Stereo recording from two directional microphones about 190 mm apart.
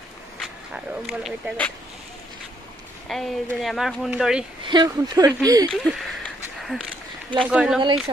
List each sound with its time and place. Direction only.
0.4 s speech: centre (ahead or behind)
3.1 s speech: centre (ahead or behind)
4.6 s speech: 20° right (ahead or behind)
5.7 s a sound: centre (ahead or behind)
7.4 s speech: 5° right (ahead or behind)